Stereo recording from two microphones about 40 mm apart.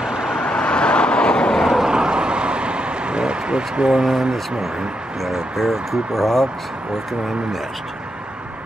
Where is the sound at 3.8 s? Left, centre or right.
Right.